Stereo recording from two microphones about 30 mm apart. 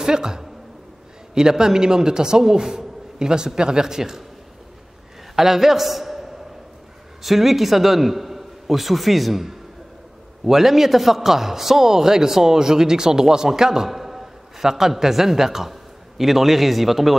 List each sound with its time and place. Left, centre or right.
0.0 s a man's voice: right
5.3 s a man's voice: centre